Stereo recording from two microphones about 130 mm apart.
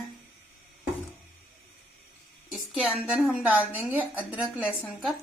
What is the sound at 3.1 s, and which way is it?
Speech, 10° right (ahead or behind).